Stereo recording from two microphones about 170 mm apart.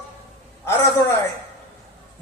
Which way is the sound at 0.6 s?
15° left (ahead or behind).